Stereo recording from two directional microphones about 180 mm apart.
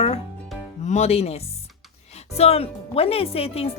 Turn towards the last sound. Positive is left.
turn(degrees=35)  # may be behind; listen again after turning